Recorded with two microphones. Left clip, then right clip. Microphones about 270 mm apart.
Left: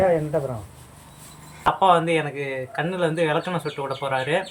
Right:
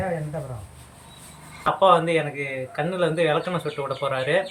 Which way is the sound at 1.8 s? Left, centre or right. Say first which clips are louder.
Right 1 dB; centre.